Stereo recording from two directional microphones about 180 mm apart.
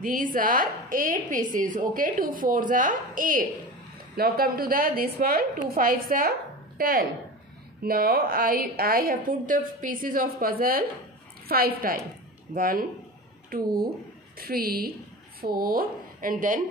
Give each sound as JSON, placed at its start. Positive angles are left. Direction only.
{"t": 0.0, "sound": "a woman's voice", "side_deg": -50}